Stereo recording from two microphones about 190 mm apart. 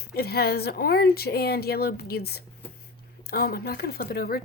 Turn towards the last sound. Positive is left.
turn(degrees=50)  # may be behind; listen again after turning